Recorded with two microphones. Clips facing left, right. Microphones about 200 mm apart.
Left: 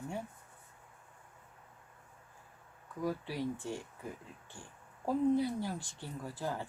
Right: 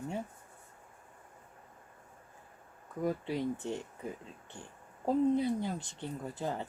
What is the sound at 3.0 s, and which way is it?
Speech, 20° right (ahead or behind).